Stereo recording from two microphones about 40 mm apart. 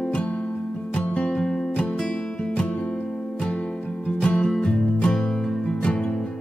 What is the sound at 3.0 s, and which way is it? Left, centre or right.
Music, centre.